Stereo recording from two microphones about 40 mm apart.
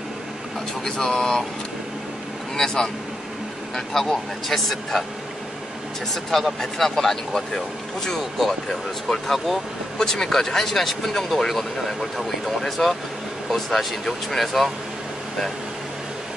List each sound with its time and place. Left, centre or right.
0.8 s speech: centre
2.5 s speech: centre
6.3 s speech: centre
8.2 s speech: centre